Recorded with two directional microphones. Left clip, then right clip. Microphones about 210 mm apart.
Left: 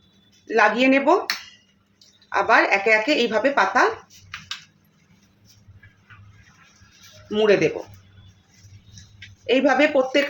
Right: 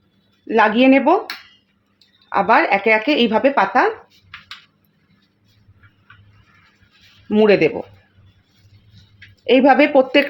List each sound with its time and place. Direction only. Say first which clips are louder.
0.4 s speech: right 4 dB; 35° right (ahead or behind)
2.3 s speech: right 3 dB; 30° right (ahead or behind)
7.3 s speech: right 4 dB; 35° right (ahead or behind)
9.5 s speech: right 5 dB; 35° right (ahead or behind)